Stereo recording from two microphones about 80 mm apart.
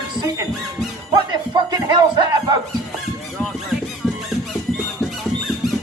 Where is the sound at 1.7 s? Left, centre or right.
Right.